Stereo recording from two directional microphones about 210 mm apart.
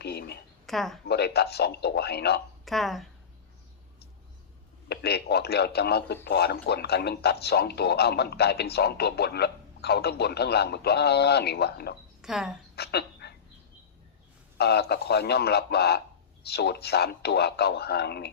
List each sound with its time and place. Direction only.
0.0 s a sound: 50° left (ahead or behind)
0.6 s speech: centre (ahead or behind)
1.0 s a man's voice: 50° left (ahead or behind)
2.6 s speech: centre (ahead or behind)
4.9 s a man's voice: 50° left (ahead or behind)
12.2 s speech: centre (ahead or behind)
12.7 s a sound: 50° left (ahead or behind)
14.6 s a man's voice: 50° left (ahead or behind)